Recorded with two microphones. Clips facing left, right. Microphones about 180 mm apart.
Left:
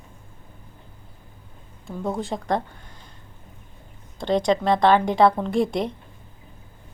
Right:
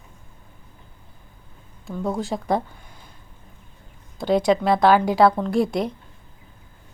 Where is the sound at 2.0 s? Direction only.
Centre (ahead or behind).